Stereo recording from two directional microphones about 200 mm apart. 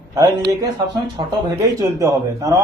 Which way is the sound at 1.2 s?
20° right (ahead or behind).